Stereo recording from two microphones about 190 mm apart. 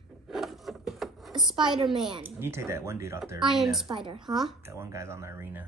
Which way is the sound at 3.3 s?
Centre (ahead or behind).